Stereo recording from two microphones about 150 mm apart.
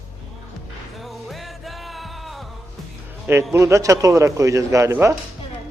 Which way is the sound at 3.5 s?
20° right (ahead or behind).